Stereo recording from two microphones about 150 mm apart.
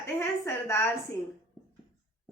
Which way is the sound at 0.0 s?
15° left (ahead or behind).